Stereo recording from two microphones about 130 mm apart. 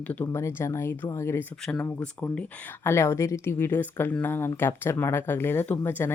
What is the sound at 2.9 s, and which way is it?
A woman's voice, 20° left (ahead or behind).